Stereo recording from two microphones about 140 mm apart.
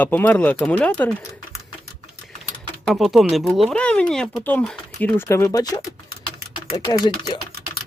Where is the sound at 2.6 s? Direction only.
5° left (ahead or behind).